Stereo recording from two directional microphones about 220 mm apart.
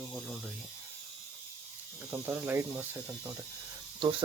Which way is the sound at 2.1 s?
10° right (ahead or behind).